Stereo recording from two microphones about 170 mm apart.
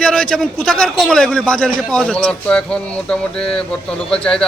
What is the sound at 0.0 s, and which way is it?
A man's voice, 5° left (ahead or behind).